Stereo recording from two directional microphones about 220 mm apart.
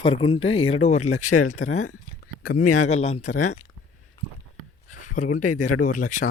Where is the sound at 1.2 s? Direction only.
90° left.